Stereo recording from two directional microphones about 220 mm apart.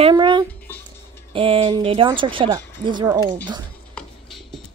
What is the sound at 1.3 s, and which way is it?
A woman's voice, 25° right (ahead or behind).